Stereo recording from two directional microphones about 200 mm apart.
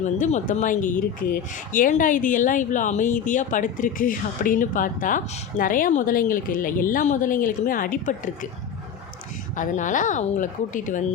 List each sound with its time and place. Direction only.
0.0 s speech: 35° left (ahead or behind)
9.6 s speech: 40° left (ahead or behind)